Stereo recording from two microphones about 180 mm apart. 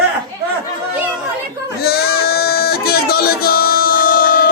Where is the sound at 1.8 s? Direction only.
60° left (ahead or behind).